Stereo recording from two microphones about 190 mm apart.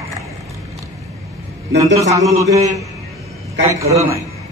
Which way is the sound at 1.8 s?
15° right (ahead or behind).